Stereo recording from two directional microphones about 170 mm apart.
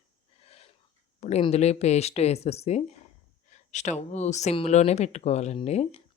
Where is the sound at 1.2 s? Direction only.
40° left (ahead or behind).